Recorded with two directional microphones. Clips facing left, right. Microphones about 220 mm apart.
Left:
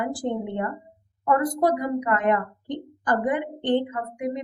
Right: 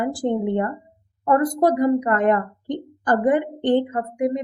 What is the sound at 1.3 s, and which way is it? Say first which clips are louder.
A woman's voice: right 3 dB; 40° right (ahead or behind).